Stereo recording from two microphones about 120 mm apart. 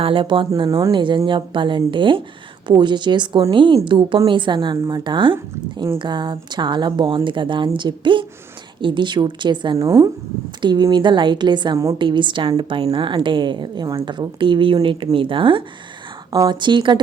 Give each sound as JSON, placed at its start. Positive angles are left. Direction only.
{"t": 0.0, "sound": "a woman's voice", "side_deg": -45}
{"t": 9.7, "sound": "a woman's voice", "side_deg": -25}